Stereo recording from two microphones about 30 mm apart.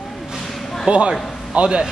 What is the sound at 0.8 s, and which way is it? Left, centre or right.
Speech, right.